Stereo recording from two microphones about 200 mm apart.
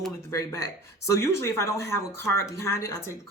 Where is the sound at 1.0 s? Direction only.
15° left (ahead or behind).